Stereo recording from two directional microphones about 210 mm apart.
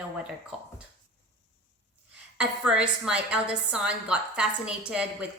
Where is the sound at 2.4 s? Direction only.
5° right (ahead or behind).